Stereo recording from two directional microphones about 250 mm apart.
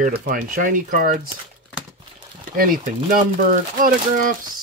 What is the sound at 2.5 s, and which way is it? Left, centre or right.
Speech, right.